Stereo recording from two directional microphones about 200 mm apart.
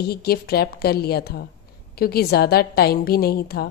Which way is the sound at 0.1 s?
50° left (ahead or behind).